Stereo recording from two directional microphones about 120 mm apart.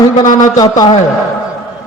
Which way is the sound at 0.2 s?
90° left.